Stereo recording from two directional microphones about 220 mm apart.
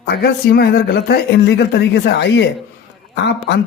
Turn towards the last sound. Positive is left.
turn(degrees=50)  # may be behind; listen again after turning